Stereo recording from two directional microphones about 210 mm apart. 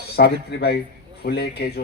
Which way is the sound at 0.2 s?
50° left (ahead or behind).